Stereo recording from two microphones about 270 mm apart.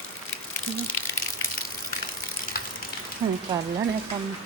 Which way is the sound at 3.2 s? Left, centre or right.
Centre.